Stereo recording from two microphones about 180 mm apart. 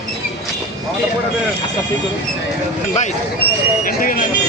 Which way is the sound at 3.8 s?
50° left (ahead or behind).